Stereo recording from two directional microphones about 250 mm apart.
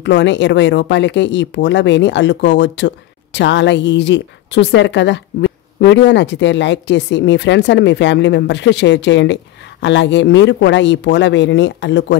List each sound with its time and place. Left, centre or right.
0.0 s a woman's voice: left